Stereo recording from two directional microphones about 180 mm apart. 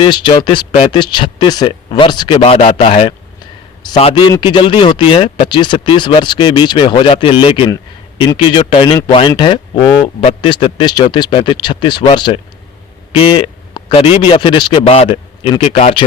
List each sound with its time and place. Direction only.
0.0 s a man's voice: 25° left (ahead or behind)